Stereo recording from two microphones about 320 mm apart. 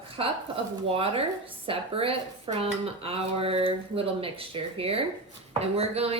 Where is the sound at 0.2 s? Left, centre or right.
Centre.